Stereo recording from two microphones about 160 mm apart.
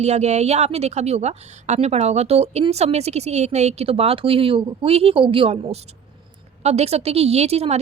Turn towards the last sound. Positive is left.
turn(degrees=-40)  # may be behind; listen again after turning